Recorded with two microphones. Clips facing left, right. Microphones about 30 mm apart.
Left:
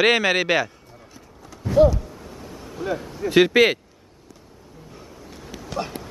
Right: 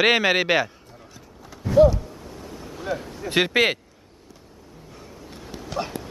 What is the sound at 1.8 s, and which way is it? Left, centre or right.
Speech, centre.